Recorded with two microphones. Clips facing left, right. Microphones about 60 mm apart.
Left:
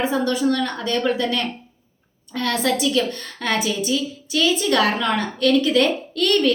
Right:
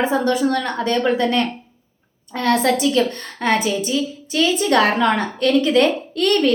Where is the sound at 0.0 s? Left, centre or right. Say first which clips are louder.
Right 2 dB; right.